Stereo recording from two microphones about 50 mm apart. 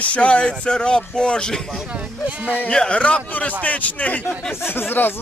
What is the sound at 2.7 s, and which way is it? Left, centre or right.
Speech, centre.